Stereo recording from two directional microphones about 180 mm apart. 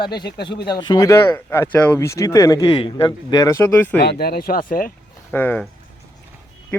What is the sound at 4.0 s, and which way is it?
Speech, 60° left (ahead or behind).